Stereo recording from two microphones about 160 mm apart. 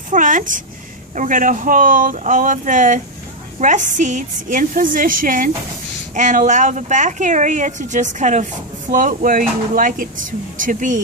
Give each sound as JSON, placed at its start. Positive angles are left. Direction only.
{"t": 0.1, "sound": "a woman's voice", "side_deg": -55}